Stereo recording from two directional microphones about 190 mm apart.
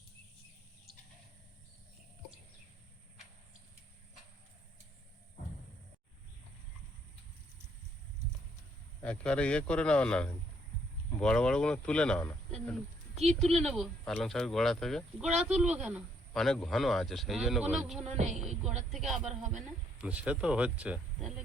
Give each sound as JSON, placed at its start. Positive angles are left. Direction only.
{"t": 9.0, "sound": "speech", "side_deg": 5}
{"t": 18.1, "sound": "speech", "side_deg": -35}
{"t": 18.9, "sound": "speech", "side_deg": 0}
{"t": 19.2, "sound": "speech", "side_deg": -40}
{"t": 20.0, "sound": "speech", "side_deg": -5}